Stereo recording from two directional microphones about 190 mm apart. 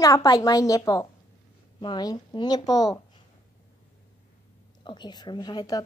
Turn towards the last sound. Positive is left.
turn(degrees=20)  # may be behind; listen again after turning